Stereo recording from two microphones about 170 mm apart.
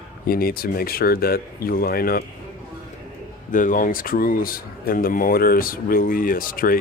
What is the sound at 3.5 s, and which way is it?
Speech, 50° left (ahead or behind).